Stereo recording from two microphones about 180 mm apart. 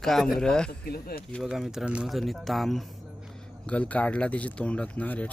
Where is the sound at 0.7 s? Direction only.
60° left (ahead or behind).